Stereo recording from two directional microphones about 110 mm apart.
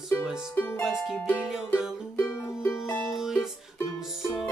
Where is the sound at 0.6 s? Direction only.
20° left (ahead or behind).